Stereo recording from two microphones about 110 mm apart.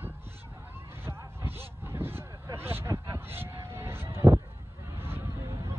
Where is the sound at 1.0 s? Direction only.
20° right (ahead or behind).